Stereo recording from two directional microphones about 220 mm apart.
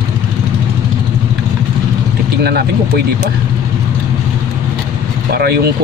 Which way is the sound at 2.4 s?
45° right (ahead or behind).